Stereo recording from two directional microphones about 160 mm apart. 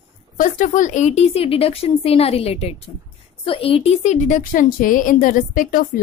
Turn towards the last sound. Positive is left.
turn(degrees=60)  # may be behind; listen again after turning